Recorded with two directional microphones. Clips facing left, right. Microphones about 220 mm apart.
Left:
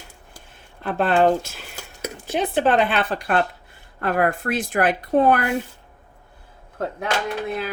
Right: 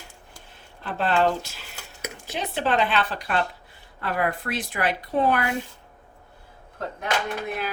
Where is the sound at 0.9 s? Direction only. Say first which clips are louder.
Left 5 dB; 55° left (ahead or behind).